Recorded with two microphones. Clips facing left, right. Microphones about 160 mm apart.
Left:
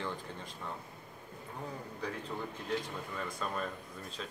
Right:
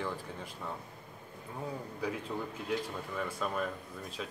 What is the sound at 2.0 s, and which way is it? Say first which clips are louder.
Speech: right 3 dB; 10° right (ahead or behind).